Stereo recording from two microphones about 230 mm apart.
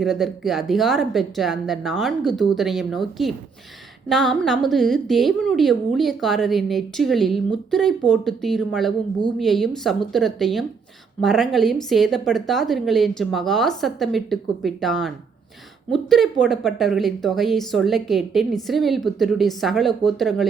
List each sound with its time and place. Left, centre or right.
0.0 s a woman's voice: centre